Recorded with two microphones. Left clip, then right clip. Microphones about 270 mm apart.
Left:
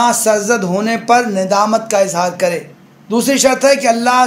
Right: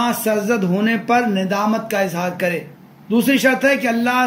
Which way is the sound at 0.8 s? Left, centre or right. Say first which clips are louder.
Left 5 dB; centre.